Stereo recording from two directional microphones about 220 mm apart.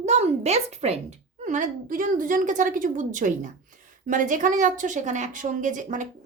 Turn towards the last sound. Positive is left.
turn(degrees=-35)  # may be behind; listen again after turning